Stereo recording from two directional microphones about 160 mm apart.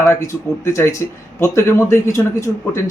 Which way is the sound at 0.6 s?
15° left (ahead or behind).